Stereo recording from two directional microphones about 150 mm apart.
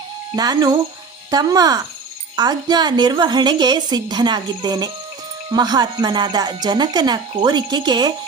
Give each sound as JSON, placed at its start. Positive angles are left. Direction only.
{"t": 0.3, "sound": "speech", "side_deg": -25}